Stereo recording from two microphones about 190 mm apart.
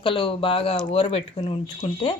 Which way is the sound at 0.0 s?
25° left (ahead or behind).